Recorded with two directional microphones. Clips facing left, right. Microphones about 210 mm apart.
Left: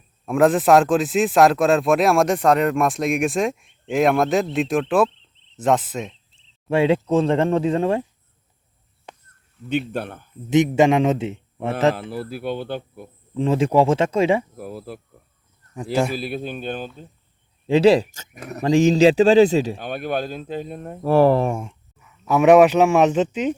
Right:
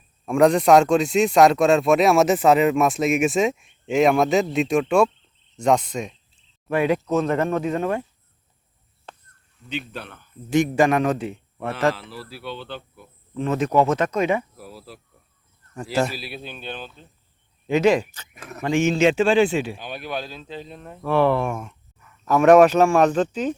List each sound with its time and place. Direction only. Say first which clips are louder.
0.3 s speech: even; 5° left (ahead or behind)
5.5 s cricket: even; 5° left (ahead or behind)
6.7 s speech: left 3 dB; 25° left (ahead or behind)
9.1 s a sound: left 1 dB; 10° left (ahead or behind)
9.6 s speech: left 8 dB; 50° left (ahead or behind)
10.5 s speech: left 3 dB; 20° left (ahead or behind)
11.9 s speech: left 9 dB; 50° left (ahead or behind)
13.3 s speech: left 2 dB; 30° left (ahead or behind)
14.5 s speech: left 8 dB; 50° left (ahead or behind)
15.7 s speech: left 2 dB; 15° left (ahead or behind)
16.1 s speech: left 8 dB; 50° left (ahead or behind)
17.7 s speech: left 4 dB; 30° left (ahead or behind)
19.9 s speech: left 6 dB; 50° left (ahead or behind); by 21.8 s 30° left (ahead or behind)
22.0 s speech: left 1 dB; 10° left (ahead or behind)